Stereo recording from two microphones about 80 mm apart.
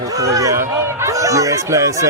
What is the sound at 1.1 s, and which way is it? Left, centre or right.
Speech, right.